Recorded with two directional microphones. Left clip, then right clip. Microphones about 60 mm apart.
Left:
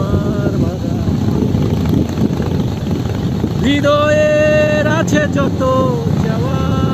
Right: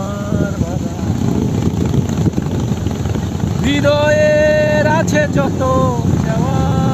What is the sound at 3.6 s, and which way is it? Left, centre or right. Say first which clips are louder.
Vehicle: left 1 dB; right.